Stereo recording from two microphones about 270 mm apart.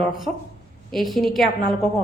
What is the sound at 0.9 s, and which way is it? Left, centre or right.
Speech, centre.